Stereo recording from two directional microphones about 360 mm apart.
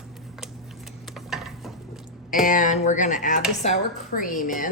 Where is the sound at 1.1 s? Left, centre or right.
Centre.